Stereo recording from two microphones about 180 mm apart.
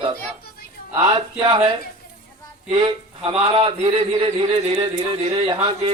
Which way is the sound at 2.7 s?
25° right (ahead or behind).